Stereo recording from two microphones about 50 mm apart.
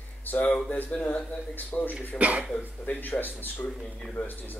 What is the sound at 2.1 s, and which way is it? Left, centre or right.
Speech, right.